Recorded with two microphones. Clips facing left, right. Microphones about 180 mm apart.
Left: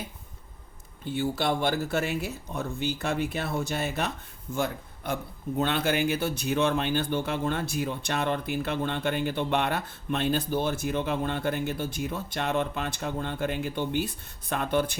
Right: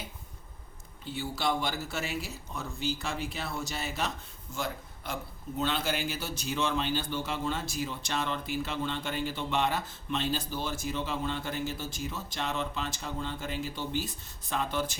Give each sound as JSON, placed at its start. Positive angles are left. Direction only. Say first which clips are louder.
{"t": 1.0, "sound": "a man's voice", "louder": "left 5 dB", "side_deg": 55}